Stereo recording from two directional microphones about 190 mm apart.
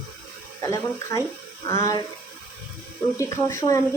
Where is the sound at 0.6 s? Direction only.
15° left (ahead or behind).